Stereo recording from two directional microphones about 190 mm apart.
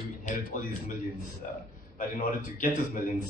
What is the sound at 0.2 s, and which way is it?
A man's voice, 45° left (ahead or behind).